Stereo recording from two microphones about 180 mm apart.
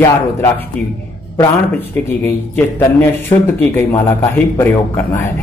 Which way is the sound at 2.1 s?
15° left (ahead or behind).